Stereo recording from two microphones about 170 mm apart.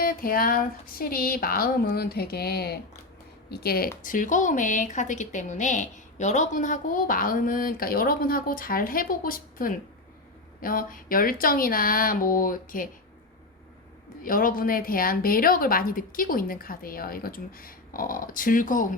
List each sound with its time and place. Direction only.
0.0 s a woman's voice: 60° left (ahead or behind)
14.3 s a woman's voice: 55° left (ahead or behind)